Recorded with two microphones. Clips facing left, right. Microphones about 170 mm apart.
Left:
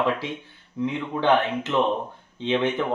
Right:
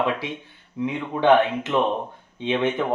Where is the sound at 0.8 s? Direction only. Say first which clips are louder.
Right 2 dB; 15° right (ahead or behind).